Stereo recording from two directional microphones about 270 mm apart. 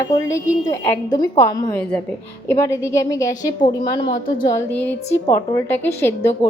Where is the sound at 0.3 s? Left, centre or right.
Centre.